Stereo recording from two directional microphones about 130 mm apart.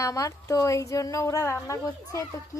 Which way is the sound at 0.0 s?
25° left (ahead or behind).